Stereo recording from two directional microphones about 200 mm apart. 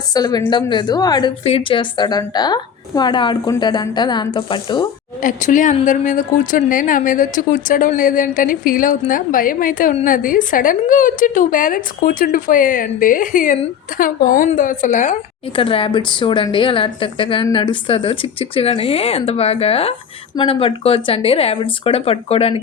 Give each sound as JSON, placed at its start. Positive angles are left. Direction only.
{"t": 0.1, "sound": "a woman's voice", "side_deg": 20}
{"t": 5.2, "sound": "a woman's voice", "side_deg": 40}
{"t": 15.5, "sound": "a woman's voice", "side_deg": 25}